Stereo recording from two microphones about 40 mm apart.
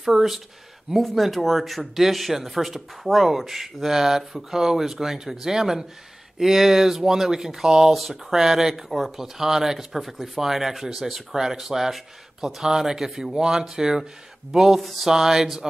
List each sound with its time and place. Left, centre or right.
0.0 s speech: centre
7.9 s speech: centre
8.8 s speech: centre
9.1 s speech: centre